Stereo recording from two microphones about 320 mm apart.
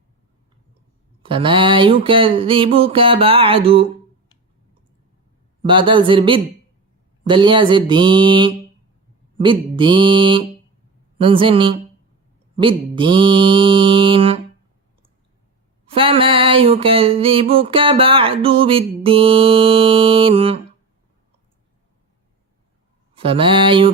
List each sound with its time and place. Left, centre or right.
1.2 s mantra: centre
5.6 s mantra: centre
15.9 s mantra: centre
23.1 s mantra: centre